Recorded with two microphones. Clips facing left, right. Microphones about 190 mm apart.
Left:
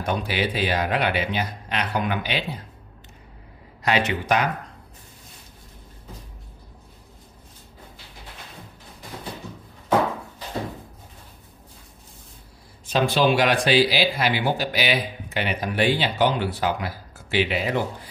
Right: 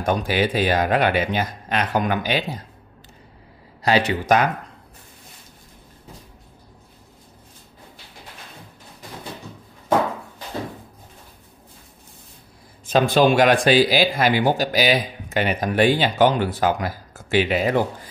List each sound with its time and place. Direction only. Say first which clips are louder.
0.0 s a man's voice: right 4 dB; 45° right (ahead or behind)
3.8 s speech: right 3 dB; 35° right (ahead or behind)
12.8 s a man's voice: right 4 dB; 50° right (ahead or behind)